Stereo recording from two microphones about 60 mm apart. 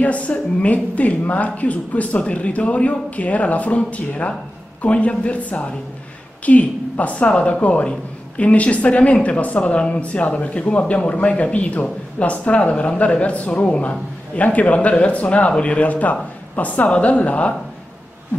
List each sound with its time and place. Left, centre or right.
0.0 s speech: left